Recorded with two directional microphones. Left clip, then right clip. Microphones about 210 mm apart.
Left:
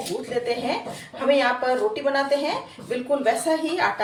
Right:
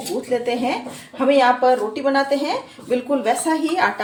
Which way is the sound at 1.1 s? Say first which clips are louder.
Right 5 dB; 40° right (ahead or behind).